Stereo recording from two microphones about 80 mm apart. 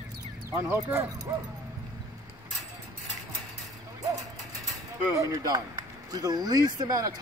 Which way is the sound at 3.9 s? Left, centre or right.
Right.